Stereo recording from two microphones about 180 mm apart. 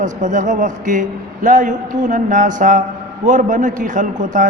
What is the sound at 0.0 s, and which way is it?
A man's voice, 45° right (ahead or behind).